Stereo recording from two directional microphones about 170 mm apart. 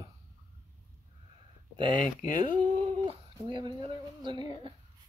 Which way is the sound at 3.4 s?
25° right (ahead or behind).